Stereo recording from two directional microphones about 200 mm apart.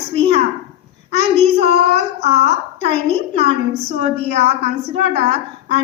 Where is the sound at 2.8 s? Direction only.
30° right (ahead or behind).